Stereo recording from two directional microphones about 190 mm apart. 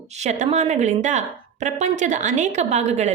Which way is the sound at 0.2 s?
35° right (ahead or behind).